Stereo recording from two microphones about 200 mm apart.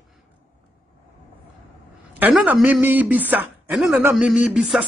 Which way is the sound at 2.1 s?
5° right (ahead or behind).